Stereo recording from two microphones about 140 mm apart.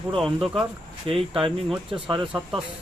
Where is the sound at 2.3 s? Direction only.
5° right (ahead or behind).